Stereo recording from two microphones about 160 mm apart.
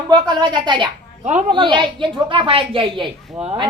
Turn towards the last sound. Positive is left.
turn(degrees=-40)  # may be behind; listen again after turning